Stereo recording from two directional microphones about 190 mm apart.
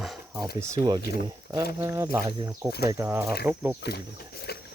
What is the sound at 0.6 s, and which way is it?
Speech, 15° right (ahead or behind).